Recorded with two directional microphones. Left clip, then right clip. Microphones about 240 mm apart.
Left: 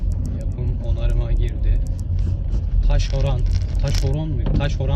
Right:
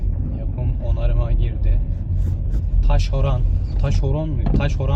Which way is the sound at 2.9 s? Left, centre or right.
Right.